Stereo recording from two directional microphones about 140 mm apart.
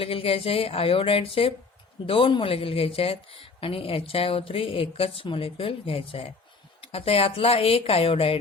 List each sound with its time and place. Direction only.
0.0 s a woman's voice: 40° left (ahead or behind)